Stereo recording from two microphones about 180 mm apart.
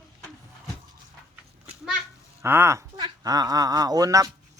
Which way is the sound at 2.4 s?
15° right (ahead or behind).